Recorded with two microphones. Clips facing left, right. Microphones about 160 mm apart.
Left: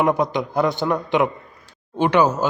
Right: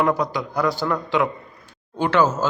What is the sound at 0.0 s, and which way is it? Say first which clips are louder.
A man's voice: left 2 dB; 20° left (ahead or behind).